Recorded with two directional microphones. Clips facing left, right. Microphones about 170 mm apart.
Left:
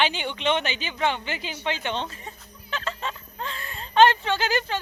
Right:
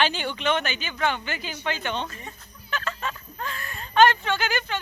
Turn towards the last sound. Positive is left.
turn(degrees=30)  # may be behind; listen again after turning